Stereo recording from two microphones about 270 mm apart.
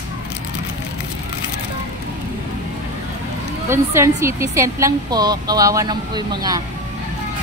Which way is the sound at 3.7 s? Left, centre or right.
Centre.